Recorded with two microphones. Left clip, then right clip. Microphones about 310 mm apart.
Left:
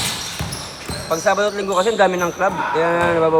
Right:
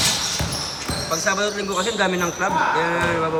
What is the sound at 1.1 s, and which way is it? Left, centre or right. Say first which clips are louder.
Speech: left 5 dB; centre.